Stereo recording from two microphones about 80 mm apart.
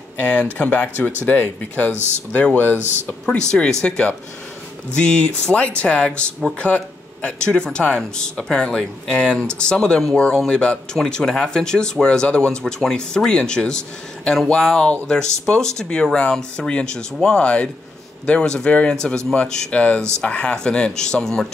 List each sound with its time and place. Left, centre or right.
0.2 s speech: centre
3.3 s speech: centre